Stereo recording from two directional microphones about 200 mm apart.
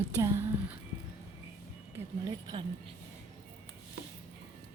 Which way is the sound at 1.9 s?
20° right (ahead or behind).